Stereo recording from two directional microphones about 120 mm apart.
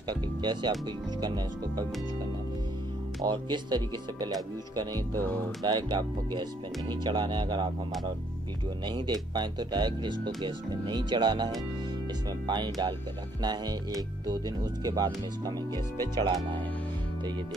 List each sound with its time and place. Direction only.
0.1 s speech: 40° right (ahead or behind)
3.3 s speech: 40° right (ahead or behind)
8.8 s speech: 40° right (ahead or behind)